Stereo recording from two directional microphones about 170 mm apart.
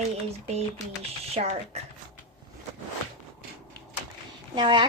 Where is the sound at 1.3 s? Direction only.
40° right (ahead or behind).